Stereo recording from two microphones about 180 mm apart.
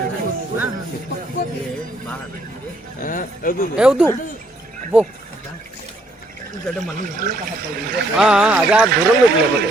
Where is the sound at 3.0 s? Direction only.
50° left (ahead or behind).